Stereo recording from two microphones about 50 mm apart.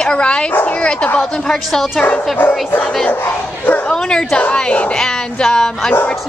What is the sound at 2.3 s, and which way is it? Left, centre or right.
Speech, left.